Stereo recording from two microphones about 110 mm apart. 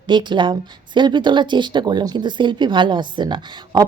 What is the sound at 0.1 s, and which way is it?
Speech, 45° right (ahead or behind).